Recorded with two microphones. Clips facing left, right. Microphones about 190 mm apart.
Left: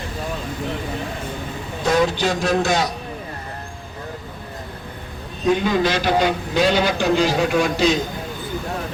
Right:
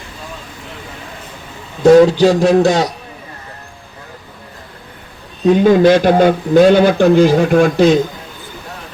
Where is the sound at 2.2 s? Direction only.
35° right (ahead or behind).